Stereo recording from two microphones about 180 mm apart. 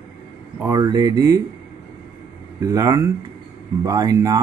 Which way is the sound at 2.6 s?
20° right (ahead or behind).